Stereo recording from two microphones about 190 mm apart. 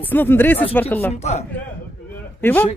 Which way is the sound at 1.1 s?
35° left (ahead or behind).